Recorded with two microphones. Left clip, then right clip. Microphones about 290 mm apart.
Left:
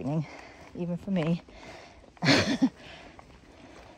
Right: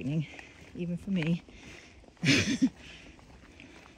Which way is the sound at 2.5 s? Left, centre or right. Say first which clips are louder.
Left 2 dB; centre.